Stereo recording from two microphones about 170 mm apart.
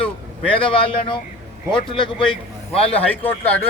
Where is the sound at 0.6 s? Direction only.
30° left (ahead or behind).